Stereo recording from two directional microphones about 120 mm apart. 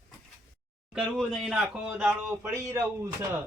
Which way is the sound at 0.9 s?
5° right (ahead or behind).